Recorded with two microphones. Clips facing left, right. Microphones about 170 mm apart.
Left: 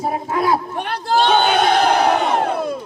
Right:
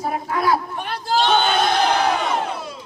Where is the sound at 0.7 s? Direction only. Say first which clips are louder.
Left 3 dB; 60° left (ahead or behind).